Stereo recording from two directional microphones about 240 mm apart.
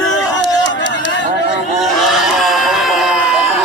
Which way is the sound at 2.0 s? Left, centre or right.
Centre.